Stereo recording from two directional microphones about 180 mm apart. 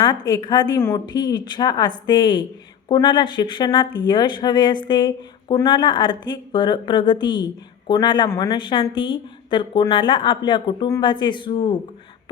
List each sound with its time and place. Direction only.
0.0 s a woman's voice: 25° left (ahead or behind)